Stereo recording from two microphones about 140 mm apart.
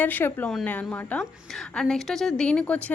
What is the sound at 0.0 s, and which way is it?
Speech, 15° left (ahead or behind).